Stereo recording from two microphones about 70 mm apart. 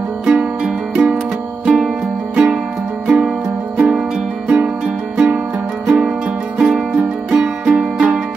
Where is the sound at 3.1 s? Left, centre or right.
Centre.